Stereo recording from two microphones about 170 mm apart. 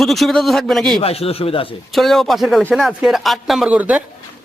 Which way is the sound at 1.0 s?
35° left (ahead or behind).